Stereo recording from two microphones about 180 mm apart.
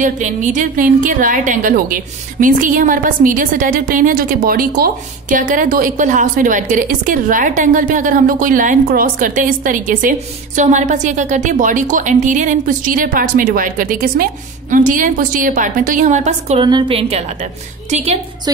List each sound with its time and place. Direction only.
0.0 s a woman's voice: 45° right (ahead or behind)
16.6 s a woman's voice: 25° right (ahead or behind)